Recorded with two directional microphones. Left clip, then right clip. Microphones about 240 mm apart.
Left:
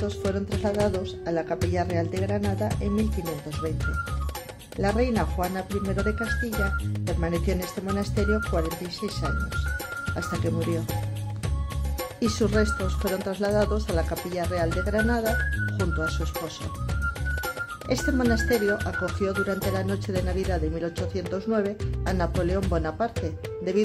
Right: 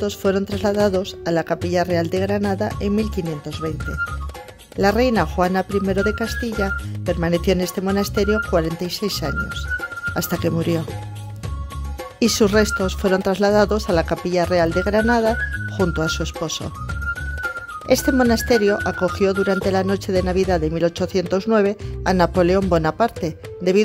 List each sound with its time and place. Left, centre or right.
0.0 s speech: right
4.7 s speech: right
12.2 s speech: right
17.8 s speech: right